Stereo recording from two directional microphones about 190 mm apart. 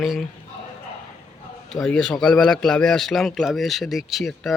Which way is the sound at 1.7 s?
5° left (ahead or behind).